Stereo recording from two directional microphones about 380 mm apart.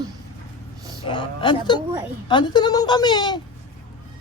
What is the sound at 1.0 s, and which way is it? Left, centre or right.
Speech, centre.